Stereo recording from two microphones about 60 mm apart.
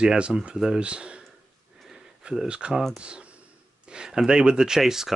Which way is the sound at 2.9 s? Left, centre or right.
Centre.